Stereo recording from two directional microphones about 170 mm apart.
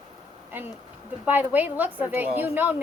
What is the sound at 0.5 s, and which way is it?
A woman's voice, 10° right (ahead or behind).